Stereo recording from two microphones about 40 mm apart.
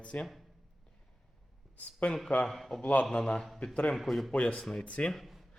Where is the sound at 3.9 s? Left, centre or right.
Centre.